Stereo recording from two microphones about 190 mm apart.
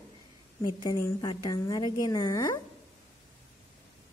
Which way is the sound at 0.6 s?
25° left (ahead or behind).